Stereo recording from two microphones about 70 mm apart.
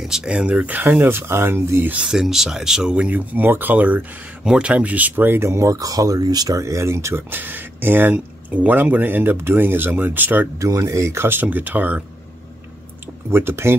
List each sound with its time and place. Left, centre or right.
0.0 s speech: centre; by 2.0 s right
2.0 s speech: centre; by 6.6 s right
6.6 s speech: right
7.2 s speech: right
10.6 s speech: right
13.3 s speech: right